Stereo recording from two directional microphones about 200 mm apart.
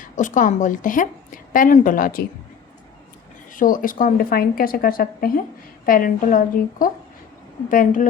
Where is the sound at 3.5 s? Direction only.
45° left (ahead or behind).